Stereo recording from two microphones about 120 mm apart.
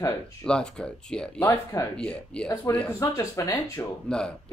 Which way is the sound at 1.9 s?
10° left (ahead or behind).